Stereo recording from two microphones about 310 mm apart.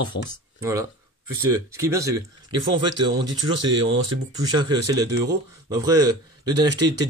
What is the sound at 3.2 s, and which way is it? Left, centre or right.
Speech, right.